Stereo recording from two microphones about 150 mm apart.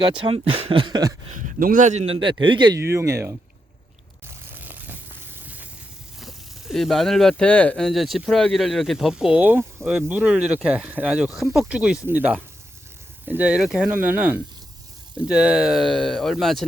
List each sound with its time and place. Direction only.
0.0 s speech: 30° right (ahead or behind)
1.4 s a man's voice: 60° right (ahead or behind)
2.1 s speech: 35° right (ahead or behind)
2.8 s speech: 20° right (ahead or behind)
4.5 s a sound: 10° right (ahead or behind)
6.1 s speech: centre (ahead or behind)